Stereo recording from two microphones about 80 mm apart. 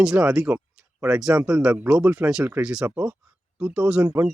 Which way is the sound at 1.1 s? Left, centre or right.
Centre.